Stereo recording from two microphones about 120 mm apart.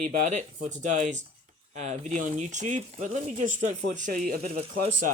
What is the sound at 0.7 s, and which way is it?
Speech, 90° right.